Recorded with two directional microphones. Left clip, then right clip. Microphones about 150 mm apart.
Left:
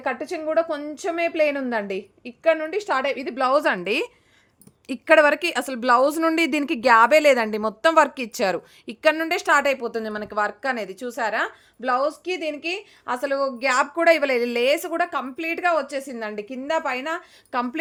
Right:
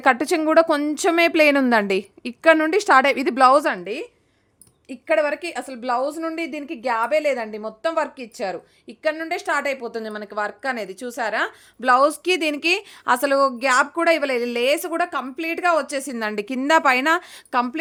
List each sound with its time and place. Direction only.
0.0 s a woman's voice: 65° right (ahead or behind)
3.8 s speech: 25° left (ahead or behind)
4.9 s a woman's voice: 40° left (ahead or behind); by 11.5 s 10° right (ahead or behind)
11.8 s a woman's voice: 45° right (ahead or behind)
13.6 s speech: 20° right (ahead or behind)
13.9 s a woman's voice: 10° right (ahead or behind); by 17.2 s 55° right (ahead or behind)
17.5 s speech: 25° right (ahead or behind)